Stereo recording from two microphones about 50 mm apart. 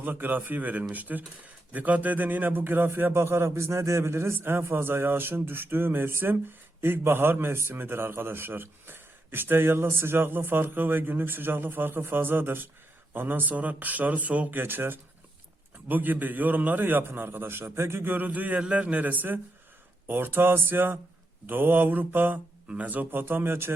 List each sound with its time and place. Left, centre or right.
0.0 s a man's voice: right
4.4 s a man's voice: right
14.6 s a man's voice: right
17.7 s a man's voice: right
23.2 s speech: right